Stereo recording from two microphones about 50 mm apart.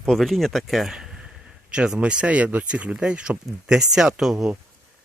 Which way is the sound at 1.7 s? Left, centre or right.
Right.